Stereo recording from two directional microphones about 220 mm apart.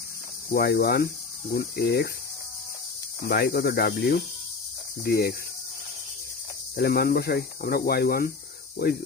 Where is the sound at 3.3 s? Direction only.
50° left (ahead or behind).